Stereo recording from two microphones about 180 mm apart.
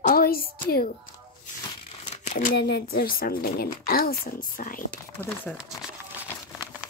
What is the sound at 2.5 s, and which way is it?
A woman's voice, 65° left (ahead or behind).